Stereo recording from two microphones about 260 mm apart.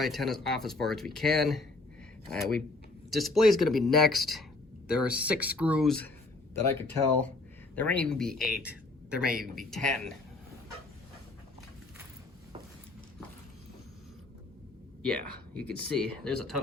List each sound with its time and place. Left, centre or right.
0.0 s speech: centre
9.2 s a woman's voice: right
9.6 s speech: centre
15.6 s speech: centre